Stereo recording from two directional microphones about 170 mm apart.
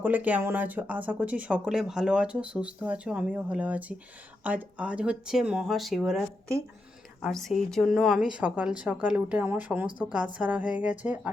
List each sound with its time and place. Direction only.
0.0 s a woman's voice: 10° right (ahead or behind)